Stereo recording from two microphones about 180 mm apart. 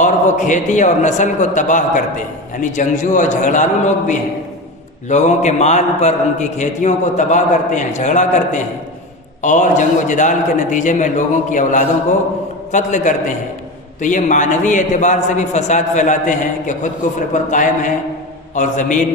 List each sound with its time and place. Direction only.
0.0 s a man's voice: 45° left (ahead or behind)